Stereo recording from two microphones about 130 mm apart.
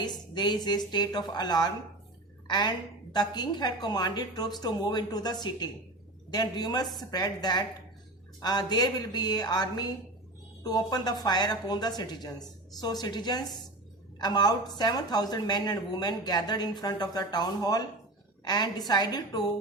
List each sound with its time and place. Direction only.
0.0 s a woman's voice: 35° left (ahead or behind)